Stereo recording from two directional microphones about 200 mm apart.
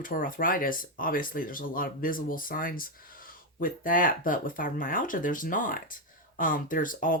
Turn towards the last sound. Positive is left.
turn(degrees=45)  # may be behind; listen again after turning